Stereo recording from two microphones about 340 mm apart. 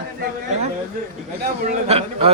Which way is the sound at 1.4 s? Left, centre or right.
Centre.